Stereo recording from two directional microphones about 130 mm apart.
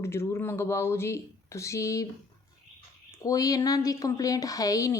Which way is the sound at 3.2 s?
25° left (ahead or behind).